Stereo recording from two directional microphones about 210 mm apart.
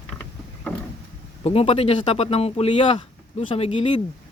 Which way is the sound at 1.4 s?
25° left (ahead or behind).